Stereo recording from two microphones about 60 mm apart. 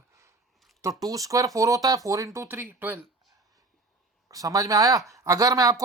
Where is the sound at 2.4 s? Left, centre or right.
Right.